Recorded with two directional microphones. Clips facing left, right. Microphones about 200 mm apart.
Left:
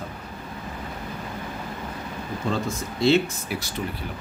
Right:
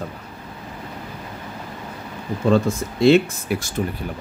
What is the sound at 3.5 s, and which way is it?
Speech, 55° right (ahead or behind).